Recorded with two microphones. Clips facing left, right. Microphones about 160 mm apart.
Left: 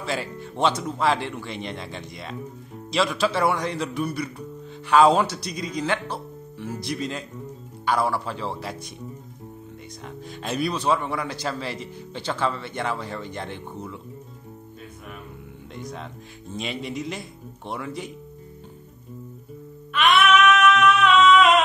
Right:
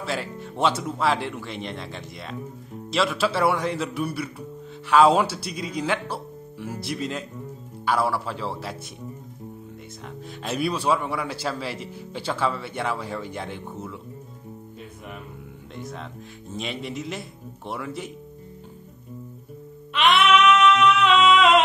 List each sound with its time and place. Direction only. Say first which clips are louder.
0.0 s speech: even; centre (ahead or behind)
10.0 s speech: even; centre (ahead or behind)
15.7 s speech: even; centre (ahead or behind)
19.9 s a sound: even; 25° right (ahead or behind)